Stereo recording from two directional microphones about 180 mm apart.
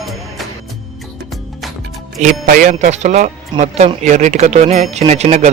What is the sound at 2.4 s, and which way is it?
Speech, 50° right (ahead or behind).